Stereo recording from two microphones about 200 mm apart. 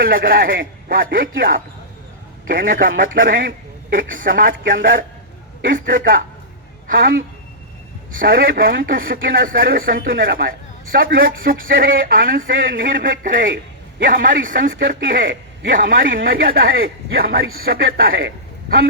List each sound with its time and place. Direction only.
0.0 s a man's voice: 45° right (ahead or behind)